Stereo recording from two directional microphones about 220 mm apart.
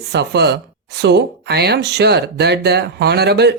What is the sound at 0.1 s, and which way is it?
Speech, 50° right (ahead or behind).